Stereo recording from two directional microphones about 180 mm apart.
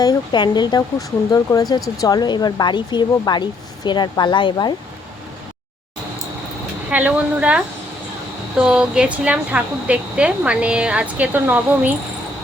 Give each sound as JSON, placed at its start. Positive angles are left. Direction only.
{"t": 0.0, "sound": "speech", "side_deg": 25}
{"t": 6.9, "sound": "speech", "side_deg": -10}
{"t": 8.6, "sound": "speech", "side_deg": -5}